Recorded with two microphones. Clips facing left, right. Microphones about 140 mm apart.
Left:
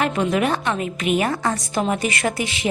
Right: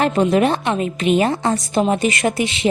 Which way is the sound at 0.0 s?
30° right (ahead or behind).